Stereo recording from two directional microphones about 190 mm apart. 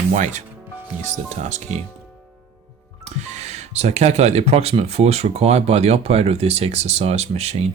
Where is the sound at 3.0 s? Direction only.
35° right (ahead or behind).